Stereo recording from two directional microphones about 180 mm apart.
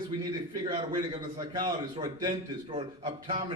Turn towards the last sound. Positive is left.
turn(degrees=-25)  # may be behind; listen again after turning